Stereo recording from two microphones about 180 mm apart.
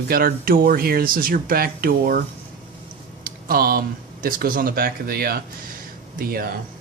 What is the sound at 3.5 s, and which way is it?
Speech, 55° right (ahead or behind).